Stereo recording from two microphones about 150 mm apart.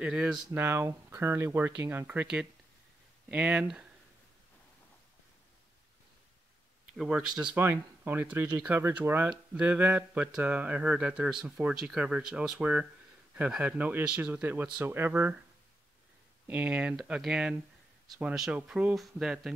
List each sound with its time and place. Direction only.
0.0 s speech: 5° right (ahead or behind)
0.5 s speech: 15° right (ahead or behind)
7.0 s speech: 5° right (ahead or behind)
16.4 s speech: 10° right (ahead or behind)